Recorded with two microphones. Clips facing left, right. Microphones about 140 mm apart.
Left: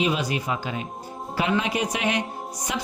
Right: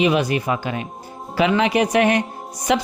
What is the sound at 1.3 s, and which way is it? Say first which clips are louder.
Speech: right 7 dB; 80° right.